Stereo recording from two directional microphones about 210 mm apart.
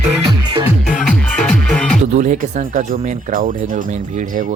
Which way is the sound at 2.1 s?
35° right (ahead or behind).